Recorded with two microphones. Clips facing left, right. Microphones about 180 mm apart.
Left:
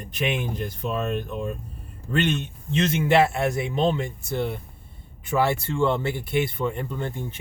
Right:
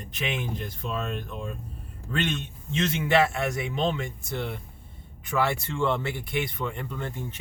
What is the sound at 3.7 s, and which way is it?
Speech, 40° left (ahead or behind).